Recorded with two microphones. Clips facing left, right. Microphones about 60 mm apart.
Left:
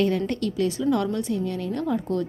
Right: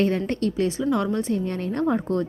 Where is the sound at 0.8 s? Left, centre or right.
Centre.